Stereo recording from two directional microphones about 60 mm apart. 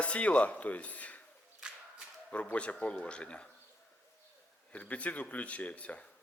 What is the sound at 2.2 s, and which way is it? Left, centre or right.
Speech, left.